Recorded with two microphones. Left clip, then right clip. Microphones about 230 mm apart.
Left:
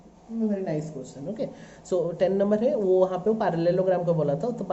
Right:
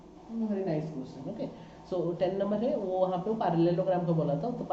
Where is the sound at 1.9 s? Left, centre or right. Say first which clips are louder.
Left 6 dB; left.